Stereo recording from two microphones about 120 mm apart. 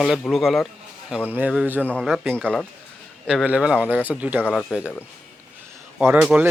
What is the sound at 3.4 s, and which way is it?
Speech, 10° right (ahead or behind).